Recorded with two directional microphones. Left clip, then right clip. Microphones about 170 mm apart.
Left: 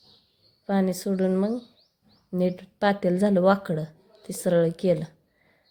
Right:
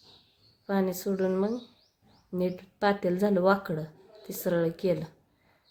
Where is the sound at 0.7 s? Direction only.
20° left (ahead or behind).